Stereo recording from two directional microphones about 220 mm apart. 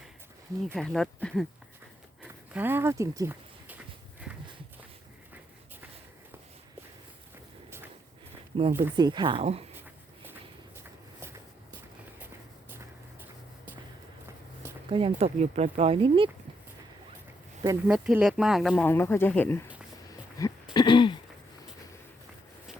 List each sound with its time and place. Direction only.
0.7 s speech: centre (ahead or behind)
2.2 s a sound: 10° right (ahead or behind)
8.7 s speech: 15° right (ahead or behind)
10.8 s walk: 10° right (ahead or behind)
14.8 s speech: 25° right (ahead or behind)
17.8 s speech: 5° right (ahead or behind)
20.4 s a sound: 15° left (ahead or behind)
20.7 s throat clearing: 20° left (ahead or behind)